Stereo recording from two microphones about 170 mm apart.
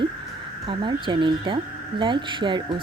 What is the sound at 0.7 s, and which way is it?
Speech, 30° right (ahead or behind).